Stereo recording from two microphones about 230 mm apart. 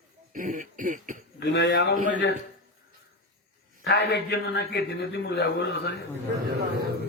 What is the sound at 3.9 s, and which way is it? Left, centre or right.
A man's voice, left.